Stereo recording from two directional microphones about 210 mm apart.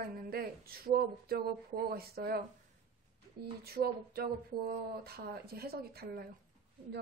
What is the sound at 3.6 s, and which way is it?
Speech, 50° right (ahead or behind).